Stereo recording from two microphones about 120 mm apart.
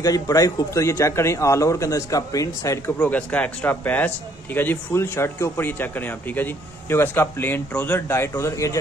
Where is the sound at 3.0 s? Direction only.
10° left (ahead or behind).